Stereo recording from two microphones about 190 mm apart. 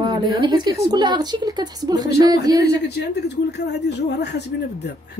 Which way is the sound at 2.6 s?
60° left (ahead or behind).